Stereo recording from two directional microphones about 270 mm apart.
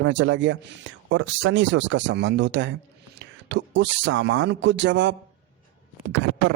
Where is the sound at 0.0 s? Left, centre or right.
Right.